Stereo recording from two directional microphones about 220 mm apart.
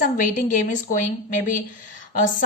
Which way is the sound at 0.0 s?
35° left (ahead or behind).